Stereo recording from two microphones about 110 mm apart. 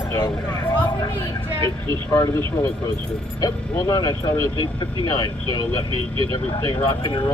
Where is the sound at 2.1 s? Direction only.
30° left (ahead or behind).